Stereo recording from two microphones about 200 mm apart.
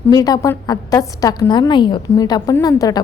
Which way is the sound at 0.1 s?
20° left (ahead or behind).